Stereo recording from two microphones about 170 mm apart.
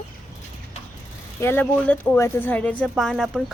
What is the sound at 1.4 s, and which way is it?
Speech, 10° left (ahead or behind).